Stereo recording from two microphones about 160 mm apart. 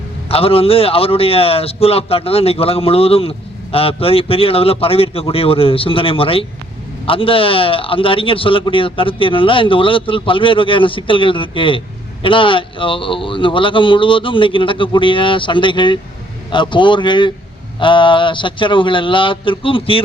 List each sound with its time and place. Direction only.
0.3 s a man's voice: 35° left (ahead or behind)